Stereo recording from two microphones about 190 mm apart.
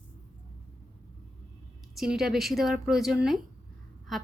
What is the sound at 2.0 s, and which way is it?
Speech, centre (ahead or behind).